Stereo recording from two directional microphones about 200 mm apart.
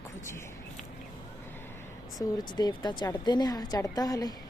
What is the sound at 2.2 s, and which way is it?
Speech, 20° left (ahead or behind).